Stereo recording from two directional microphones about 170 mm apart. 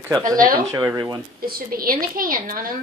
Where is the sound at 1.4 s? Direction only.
60° right (ahead or behind).